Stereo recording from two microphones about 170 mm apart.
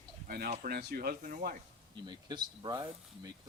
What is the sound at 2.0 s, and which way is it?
Speech, 25° right (ahead or behind).